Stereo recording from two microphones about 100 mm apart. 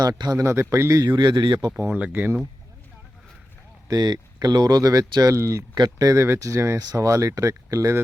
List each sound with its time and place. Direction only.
0.0 s speech: 40° right (ahead or behind)
1.7 s speech: 15° right (ahead or behind)
3.8 s speech: 45° right (ahead or behind)
5.7 s speech: 45° right (ahead or behind)